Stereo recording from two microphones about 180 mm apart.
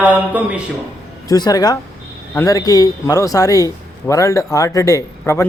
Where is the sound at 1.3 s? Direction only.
20° left (ahead or behind).